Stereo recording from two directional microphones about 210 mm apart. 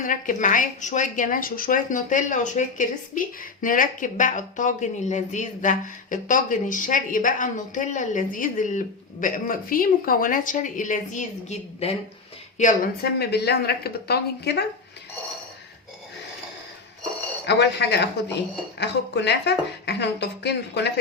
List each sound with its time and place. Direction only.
0.0 s a woman's voice: 40° left (ahead or behind)
17.4 s a woman's voice: 55° left (ahead or behind)